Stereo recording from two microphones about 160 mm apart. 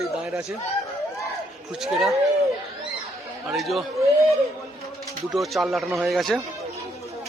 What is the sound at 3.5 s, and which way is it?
Speech, centre (ahead or behind).